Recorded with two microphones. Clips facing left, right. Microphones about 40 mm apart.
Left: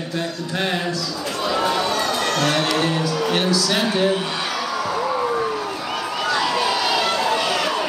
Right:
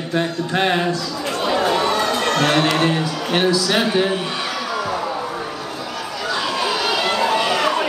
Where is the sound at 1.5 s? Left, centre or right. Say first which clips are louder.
Right 2 dB; centre.